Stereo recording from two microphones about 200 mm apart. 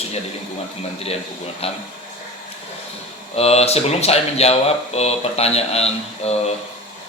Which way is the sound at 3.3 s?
30° left (ahead or behind).